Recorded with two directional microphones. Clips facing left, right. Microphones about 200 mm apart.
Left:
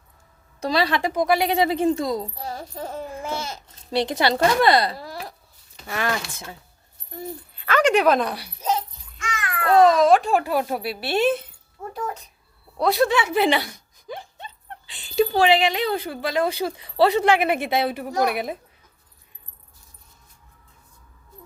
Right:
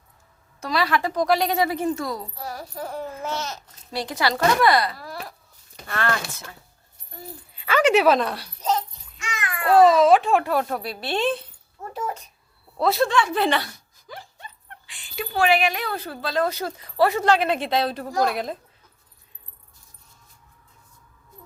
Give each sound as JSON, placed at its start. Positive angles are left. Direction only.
{"t": 0.6, "sound": "a child's voice", "side_deg": 20}
{"t": 1.6, "sound": "a child's voice", "side_deg": 25}
{"t": 3.9, "sound": "a child's voice", "side_deg": 20}
{"t": 5.9, "sound": "a woman's voice", "side_deg": 15}
{"t": 7.6, "sound": "speech", "side_deg": -5}
{"t": 9.6, "sound": "speech", "side_deg": -5}
{"t": 12.8, "sound": "a woman's voice", "side_deg": 0}